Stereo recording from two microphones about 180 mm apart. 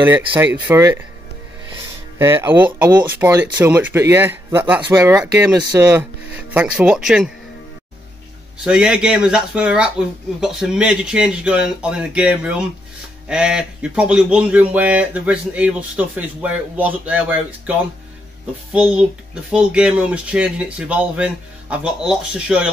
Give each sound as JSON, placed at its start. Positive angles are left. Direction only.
{"t": 0.7, "sound": "speech", "side_deg": -15}
{"t": 2.1, "sound": "speech", "side_deg": -15}
{"t": 6.5, "sound": "speech", "side_deg": -5}
{"t": 8.6, "sound": "speech", "side_deg": -5}